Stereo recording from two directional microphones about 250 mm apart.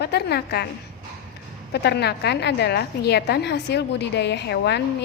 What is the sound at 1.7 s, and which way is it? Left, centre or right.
A woman's voice, left.